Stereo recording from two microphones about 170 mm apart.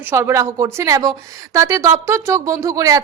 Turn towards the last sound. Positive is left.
turn(degrees=-20)  # may be behind; listen again after turning